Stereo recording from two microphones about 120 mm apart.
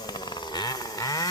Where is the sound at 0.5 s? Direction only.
35° left (ahead or behind).